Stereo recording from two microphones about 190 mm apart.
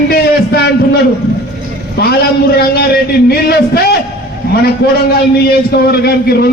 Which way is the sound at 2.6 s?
55° left (ahead or behind).